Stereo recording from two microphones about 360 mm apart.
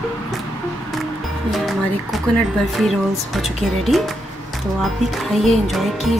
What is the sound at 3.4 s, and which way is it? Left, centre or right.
Music, centre.